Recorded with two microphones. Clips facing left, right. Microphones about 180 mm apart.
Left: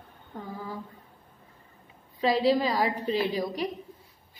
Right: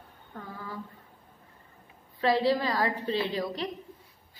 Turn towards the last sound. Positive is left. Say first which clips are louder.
# left 2 dB
turn(degrees=10)  # may be behind; listen again after turning